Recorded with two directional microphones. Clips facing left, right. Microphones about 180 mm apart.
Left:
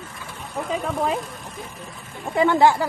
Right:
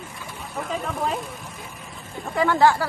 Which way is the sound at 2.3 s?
20° left (ahead or behind).